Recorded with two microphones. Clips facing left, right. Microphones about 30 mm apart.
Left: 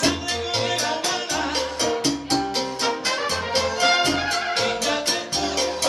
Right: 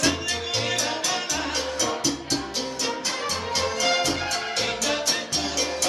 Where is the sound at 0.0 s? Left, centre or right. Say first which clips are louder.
Left 2 dB; centre.